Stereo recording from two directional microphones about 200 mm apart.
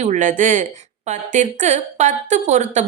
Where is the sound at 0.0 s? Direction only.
40° right (ahead or behind).